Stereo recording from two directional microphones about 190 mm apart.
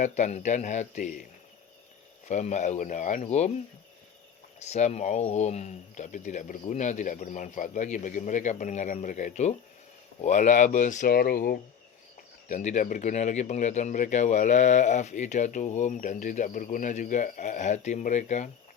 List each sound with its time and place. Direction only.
0.0 s speech: 40° left (ahead or behind)
2.2 s speech: 40° left (ahead or behind)
4.6 s speech: 35° left (ahead or behind)